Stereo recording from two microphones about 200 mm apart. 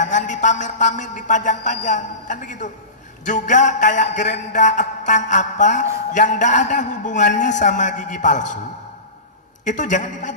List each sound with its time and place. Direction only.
0.0 s a woman's voice: 40° left (ahead or behind)
9.7 s a woman's voice: 40° left (ahead or behind)